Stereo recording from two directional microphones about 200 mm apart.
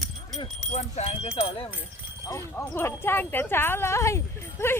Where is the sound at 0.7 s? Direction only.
35° left (ahead or behind).